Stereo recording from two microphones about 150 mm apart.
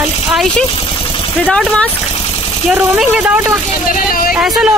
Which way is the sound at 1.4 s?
5° left (ahead or behind).